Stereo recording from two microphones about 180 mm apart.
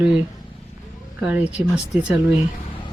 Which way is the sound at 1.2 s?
5° right (ahead or behind).